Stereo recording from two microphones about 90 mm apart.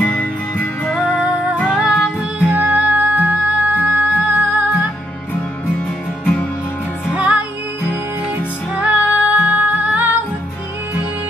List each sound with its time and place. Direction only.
0.0 s music: 20° left (ahead or behind)
1.7 s music: 10° right (ahead or behind)
7.1 s music: 15° right (ahead or behind)
8.7 s music: 15° right (ahead or behind)